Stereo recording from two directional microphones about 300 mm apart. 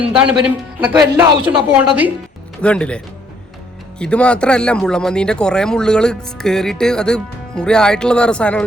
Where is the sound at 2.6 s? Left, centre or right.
Centre.